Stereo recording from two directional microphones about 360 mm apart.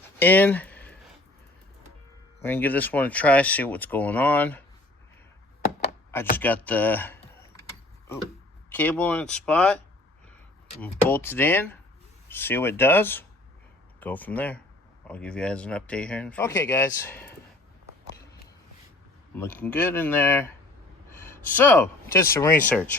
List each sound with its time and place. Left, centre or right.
0.2 s a sound: centre
2.4 s speech: centre
6.3 s speech: centre
8.7 s speech: centre
11.1 s speech: centre
19.4 s speech: centre